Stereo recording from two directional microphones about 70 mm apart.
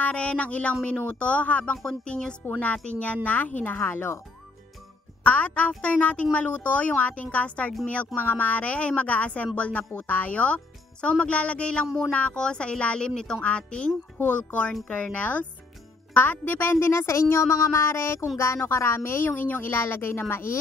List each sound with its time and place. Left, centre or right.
0.0 s speech: centre; by 4.2 s left
5.2 s speech: left
16.8 s a woman's voice: left